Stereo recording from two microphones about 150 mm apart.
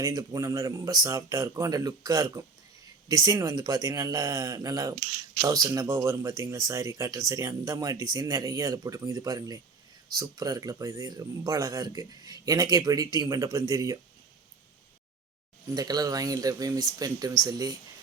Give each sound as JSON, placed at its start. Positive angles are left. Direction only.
{"t": 0.0, "sound": "speech", "side_deg": -25}
{"t": 15.7, "sound": "speech", "side_deg": -25}